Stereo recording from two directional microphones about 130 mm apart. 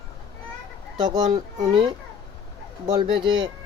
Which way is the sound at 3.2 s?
35° right (ahead or behind).